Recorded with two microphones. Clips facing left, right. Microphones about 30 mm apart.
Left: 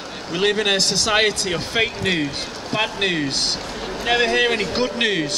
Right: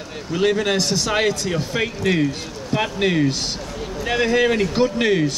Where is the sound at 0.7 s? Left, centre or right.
Left.